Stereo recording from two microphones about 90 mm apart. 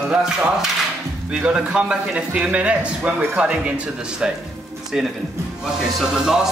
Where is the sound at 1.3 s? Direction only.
10° right (ahead or behind).